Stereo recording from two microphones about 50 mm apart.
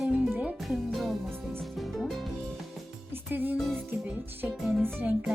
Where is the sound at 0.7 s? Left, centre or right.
Centre.